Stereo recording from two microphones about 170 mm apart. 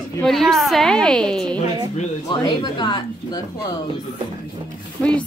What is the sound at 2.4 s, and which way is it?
Speech, 25° left (ahead or behind).